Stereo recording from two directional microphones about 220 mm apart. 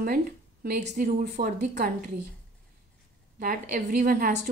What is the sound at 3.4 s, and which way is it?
Speech, 40° right (ahead or behind).